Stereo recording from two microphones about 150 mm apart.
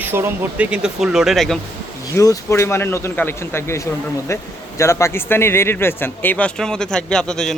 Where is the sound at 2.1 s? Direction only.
20° left (ahead or behind).